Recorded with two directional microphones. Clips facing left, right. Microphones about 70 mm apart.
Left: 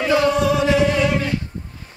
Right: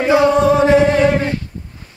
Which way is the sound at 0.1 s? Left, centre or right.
Right.